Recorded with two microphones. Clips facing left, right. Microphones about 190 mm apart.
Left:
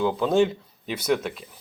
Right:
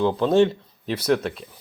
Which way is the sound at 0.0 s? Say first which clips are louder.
Right 3 dB; 5° left (ahead or behind).